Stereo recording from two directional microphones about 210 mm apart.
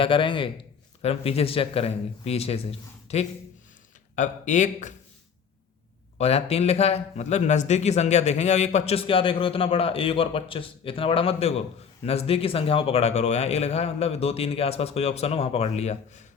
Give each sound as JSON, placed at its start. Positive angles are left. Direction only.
{"t": 0.0, "sound": "a man's voice", "side_deg": 25}
{"t": 6.1, "sound": "speech", "side_deg": 30}